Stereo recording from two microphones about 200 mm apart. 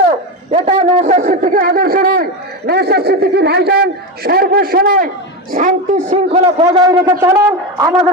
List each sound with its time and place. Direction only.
0.5 s speech: 30° right (ahead or behind)
6.8 s a man's voice: 20° right (ahead or behind)